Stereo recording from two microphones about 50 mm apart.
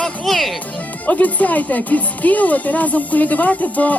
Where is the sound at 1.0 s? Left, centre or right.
Left.